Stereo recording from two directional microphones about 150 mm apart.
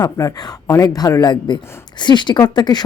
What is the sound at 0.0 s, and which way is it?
Speech, 25° left (ahead or behind).